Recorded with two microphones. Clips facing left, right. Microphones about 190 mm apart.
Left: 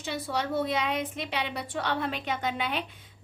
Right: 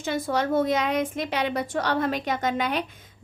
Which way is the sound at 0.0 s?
45° right (ahead or behind).